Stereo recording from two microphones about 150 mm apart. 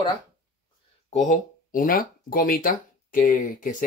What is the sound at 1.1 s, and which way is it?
Speech, 55° left (ahead or behind).